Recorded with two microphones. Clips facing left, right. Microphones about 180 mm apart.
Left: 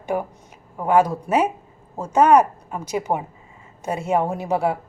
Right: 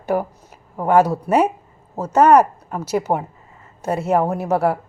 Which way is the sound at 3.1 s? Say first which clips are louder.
Right 1 dB; 20° right (ahead or behind).